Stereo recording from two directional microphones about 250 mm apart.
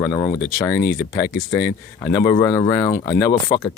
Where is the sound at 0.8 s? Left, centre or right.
Left.